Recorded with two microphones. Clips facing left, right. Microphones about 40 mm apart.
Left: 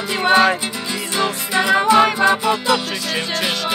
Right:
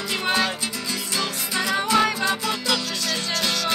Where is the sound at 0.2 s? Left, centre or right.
Left.